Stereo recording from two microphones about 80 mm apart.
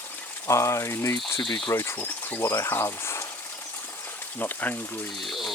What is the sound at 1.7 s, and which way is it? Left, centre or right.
Speech, left.